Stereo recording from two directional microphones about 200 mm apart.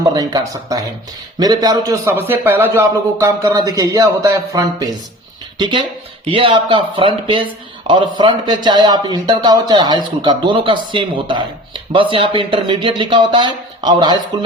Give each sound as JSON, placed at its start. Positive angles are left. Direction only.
{"t": 0.0, "sound": "a man's voice", "side_deg": -20}